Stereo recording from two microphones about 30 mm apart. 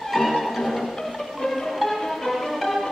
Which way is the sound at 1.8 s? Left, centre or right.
Centre.